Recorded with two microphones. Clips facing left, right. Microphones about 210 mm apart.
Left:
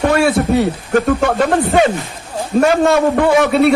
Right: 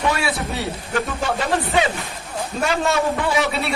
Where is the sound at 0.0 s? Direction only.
55° left (ahead or behind).